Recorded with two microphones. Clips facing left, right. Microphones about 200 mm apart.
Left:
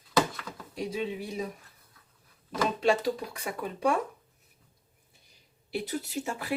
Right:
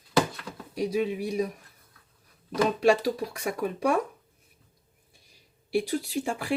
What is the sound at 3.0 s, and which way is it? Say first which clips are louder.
Speech: right 3 dB; 25° left (ahead or behind).